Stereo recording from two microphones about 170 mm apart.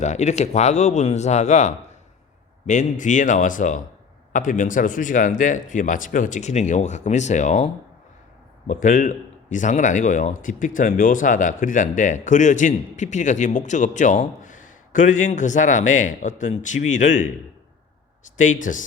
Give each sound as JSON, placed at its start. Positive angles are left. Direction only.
{"t": 0.0, "sound": "a man's voice", "side_deg": 40}
{"t": 18.3, "sound": "a man's voice", "side_deg": 50}